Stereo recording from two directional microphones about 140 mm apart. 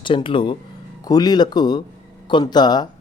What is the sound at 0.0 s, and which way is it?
A man's voice, 35° left (ahead or behind).